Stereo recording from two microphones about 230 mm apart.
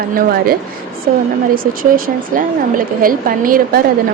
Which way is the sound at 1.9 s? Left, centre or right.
Right.